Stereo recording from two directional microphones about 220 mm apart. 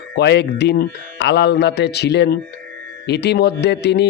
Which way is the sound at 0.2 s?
50° left (ahead or behind).